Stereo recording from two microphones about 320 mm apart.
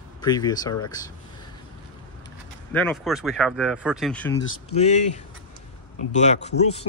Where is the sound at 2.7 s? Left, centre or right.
Centre.